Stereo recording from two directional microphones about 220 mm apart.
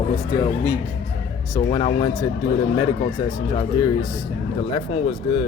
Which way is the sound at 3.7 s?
20° left (ahead or behind).